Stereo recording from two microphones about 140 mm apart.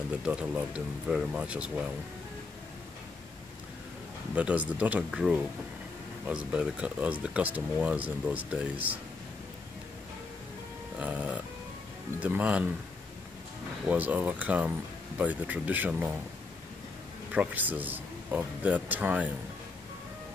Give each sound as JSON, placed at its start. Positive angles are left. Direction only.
{"t": 0.2, "sound": "speech", "side_deg": -5}
{"t": 4.4, "sound": "speech", "side_deg": -10}
{"t": 11.0, "sound": "speech", "side_deg": -10}
{"t": 13.8, "sound": "speech", "side_deg": -10}
{"t": 17.3, "sound": "speech", "side_deg": -10}